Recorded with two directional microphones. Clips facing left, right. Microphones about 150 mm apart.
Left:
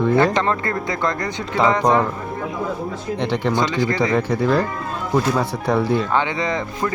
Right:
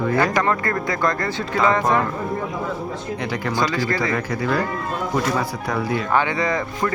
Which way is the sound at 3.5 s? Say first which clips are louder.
Right 1 dB; 20° left (ahead or behind).